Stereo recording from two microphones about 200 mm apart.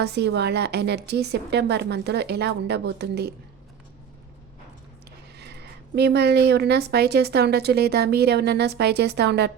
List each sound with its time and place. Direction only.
0.0 s a woman's voice: 55° right (ahead or behind)
6.0 s a woman's voice: 55° right (ahead or behind)